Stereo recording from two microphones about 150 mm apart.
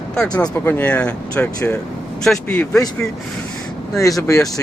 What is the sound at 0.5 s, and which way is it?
Speech, 15° left (ahead or behind).